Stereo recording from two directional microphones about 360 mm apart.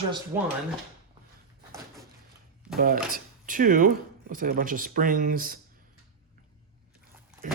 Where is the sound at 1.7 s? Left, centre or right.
Centre.